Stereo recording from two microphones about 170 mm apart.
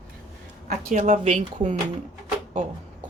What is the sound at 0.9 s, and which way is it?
Speech, 45° right (ahead or behind).